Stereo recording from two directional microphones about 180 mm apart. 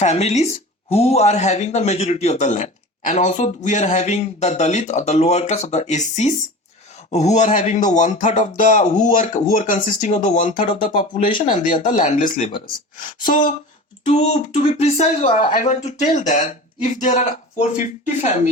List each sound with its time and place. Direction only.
0.0 s speech: 35° left (ahead or behind)
10.9 s speech: 30° left (ahead or behind)
11.3 s speech: 45° left (ahead or behind)
12.5 s speech: 30° left (ahead or behind)
13.0 s speech: 50° left (ahead or behind)
14.0 s speech: 35° left (ahead or behind)